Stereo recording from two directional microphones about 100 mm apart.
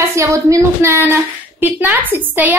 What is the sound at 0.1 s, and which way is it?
Speech, 30° right (ahead or behind).